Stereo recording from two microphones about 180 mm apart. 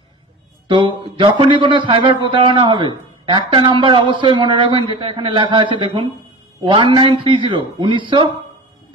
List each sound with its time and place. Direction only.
0.7 s a man's voice: 25° right (ahead or behind)